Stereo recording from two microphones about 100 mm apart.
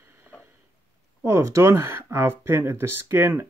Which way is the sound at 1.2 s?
30° right (ahead or behind).